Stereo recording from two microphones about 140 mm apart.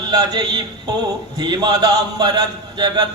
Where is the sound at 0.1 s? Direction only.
30° right (ahead or behind).